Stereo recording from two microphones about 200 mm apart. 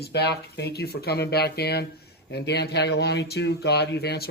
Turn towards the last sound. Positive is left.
turn(degrees=55)  # may be behind; listen again after turning